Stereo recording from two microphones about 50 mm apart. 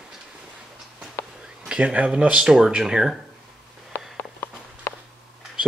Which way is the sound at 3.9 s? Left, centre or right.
Left.